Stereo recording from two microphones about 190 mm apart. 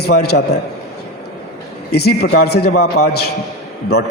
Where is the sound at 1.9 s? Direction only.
60° left (ahead or behind).